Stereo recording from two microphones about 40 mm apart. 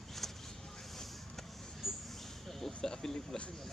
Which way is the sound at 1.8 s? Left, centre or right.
Centre.